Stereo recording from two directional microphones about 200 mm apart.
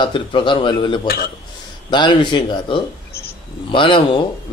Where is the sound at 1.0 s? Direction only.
50° left (ahead or behind).